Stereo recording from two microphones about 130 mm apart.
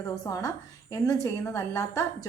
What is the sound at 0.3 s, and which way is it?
A woman's voice, 25° left (ahead or behind).